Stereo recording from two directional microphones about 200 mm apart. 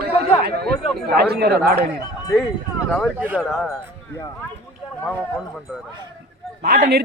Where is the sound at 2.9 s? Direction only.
5° left (ahead or behind).